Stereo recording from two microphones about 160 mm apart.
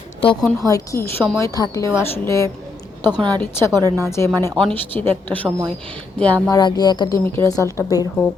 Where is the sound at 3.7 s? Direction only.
20° right (ahead or behind).